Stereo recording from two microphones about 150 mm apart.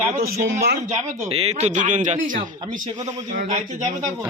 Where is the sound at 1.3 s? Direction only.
45° right (ahead or behind).